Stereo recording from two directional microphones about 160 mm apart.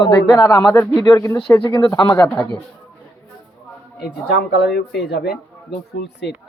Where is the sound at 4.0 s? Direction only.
90° left.